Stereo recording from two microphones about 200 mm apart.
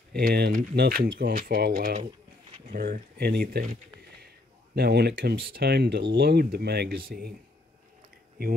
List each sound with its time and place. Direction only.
0.1 s speech: 50° right (ahead or behind)
4.7 s speech: 55° right (ahead or behind)